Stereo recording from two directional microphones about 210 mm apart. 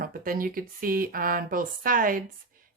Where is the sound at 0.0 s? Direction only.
40° right (ahead or behind).